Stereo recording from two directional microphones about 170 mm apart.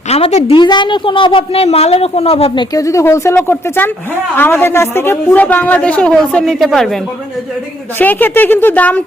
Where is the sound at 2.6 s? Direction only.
20° left (ahead or behind).